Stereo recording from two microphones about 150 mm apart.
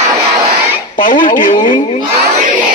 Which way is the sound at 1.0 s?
65° left (ahead or behind).